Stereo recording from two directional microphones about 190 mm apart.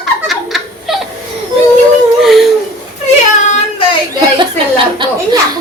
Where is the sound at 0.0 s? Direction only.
Centre (ahead or behind).